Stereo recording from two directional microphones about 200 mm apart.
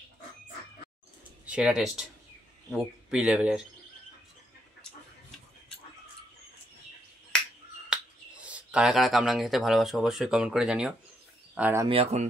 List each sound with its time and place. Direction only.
1.4 s speech: 5° right (ahead or behind)
7.9 s speech: 5° right (ahead or behind)
11.8 s speech: 30° right (ahead or behind)